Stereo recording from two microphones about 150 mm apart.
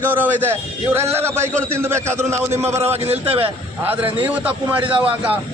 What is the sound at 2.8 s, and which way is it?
Speech, 45° right (ahead or behind).